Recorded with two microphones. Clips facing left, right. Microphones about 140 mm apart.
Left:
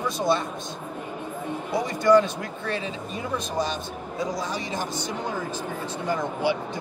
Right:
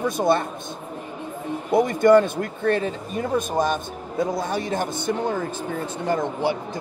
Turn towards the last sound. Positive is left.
turn(degrees=-45)  # may be behind; listen again after turning